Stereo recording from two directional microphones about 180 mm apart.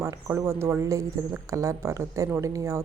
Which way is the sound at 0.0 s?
15° right (ahead or behind).